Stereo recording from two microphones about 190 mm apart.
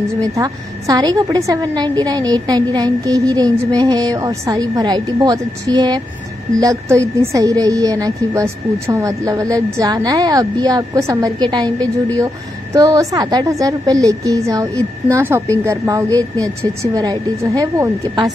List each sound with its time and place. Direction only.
0.2 s a woman's voice: 20° right (ahead or behind)
12.7 s a woman's voice: 15° right (ahead or behind)